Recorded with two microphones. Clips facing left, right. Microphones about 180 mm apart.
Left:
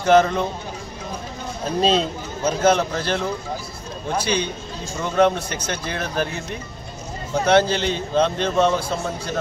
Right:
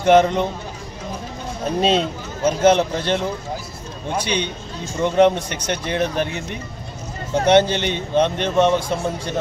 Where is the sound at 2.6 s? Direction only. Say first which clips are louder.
Right 3 dB; 20° right (ahead or behind).